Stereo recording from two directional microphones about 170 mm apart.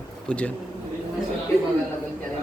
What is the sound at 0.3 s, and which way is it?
Speech, 5° left (ahead or behind).